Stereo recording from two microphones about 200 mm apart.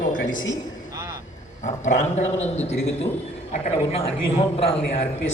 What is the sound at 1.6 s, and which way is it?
A man's voice, 35° left (ahead or behind).